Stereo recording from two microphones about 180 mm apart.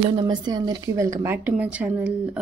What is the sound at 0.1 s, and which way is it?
Speech, 25° right (ahead or behind).